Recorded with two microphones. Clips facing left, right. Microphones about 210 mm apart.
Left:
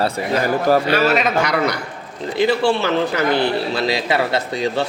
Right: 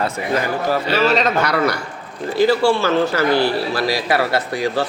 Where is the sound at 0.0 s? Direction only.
40° left (ahead or behind).